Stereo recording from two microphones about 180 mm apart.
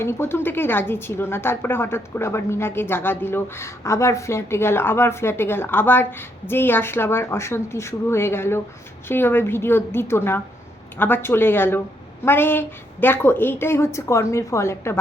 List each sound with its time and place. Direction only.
0.0 s a woman's voice: 15° left (ahead or behind)